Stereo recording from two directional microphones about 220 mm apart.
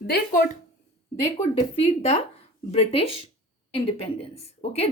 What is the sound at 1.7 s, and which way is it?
A woman's voice, 30° left (ahead or behind).